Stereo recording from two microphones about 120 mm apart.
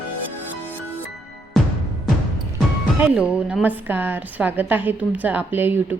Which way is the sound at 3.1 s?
10° right (ahead or behind).